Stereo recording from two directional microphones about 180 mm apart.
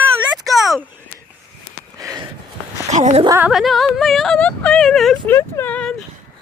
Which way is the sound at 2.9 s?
40° right (ahead or behind).